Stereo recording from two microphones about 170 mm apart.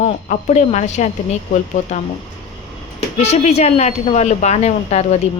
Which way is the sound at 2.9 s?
40° left (ahead or behind).